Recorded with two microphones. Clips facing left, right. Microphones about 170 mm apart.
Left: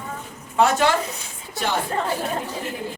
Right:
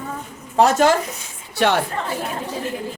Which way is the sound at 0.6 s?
45° right (ahead or behind).